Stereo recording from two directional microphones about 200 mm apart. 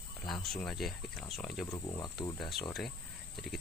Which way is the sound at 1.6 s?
15° left (ahead or behind).